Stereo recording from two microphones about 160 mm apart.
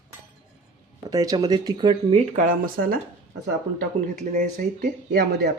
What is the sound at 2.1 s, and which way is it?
Speech, 55° right (ahead or behind).